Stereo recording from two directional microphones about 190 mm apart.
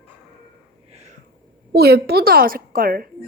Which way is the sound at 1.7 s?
55° right (ahead or behind).